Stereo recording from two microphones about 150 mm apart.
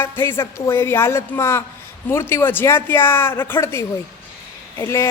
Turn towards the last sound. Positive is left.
turn(degrees=20)  # may be behind; listen again after turning